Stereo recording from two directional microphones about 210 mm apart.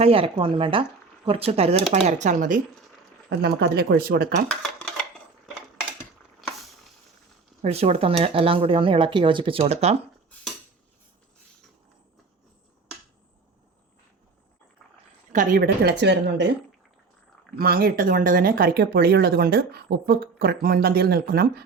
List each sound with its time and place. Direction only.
0.0 s speech: 25° right (ahead or behind)
3.2 s speech: 50° right (ahead or behind)
4.4 s a sound: 5° left (ahead or behind)
7.6 s speech: 30° right (ahead or behind)
15.3 s speech: 40° right (ahead or behind)
17.6 s speech: 45° right (ahead or behind)